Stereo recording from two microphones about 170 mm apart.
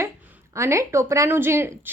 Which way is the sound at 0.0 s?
15° right (ahead or behind).